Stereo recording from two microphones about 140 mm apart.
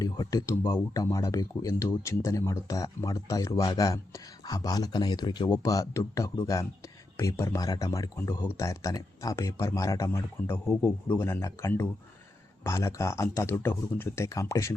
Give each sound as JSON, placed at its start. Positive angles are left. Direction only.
{"t": 0.0, "sound": "speech", "side_deg": 25}